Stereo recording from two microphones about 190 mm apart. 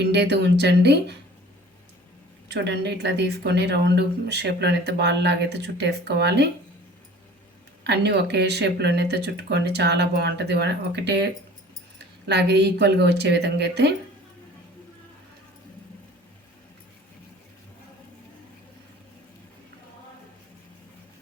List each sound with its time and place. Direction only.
0.0 s speech: 65° right (ahead or behind)
2.5 s speech: 65° right (ahead or behind)
7.9 s speech: 60° right (ahead or behind)
12.3 s speech: 65° right (ahead or behind)